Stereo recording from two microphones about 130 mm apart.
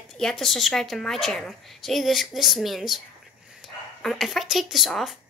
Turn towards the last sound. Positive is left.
turn(degrees=0)  # may be behind; listen again after turning